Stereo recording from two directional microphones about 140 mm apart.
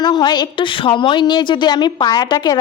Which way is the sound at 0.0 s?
30° left (ahead or behind).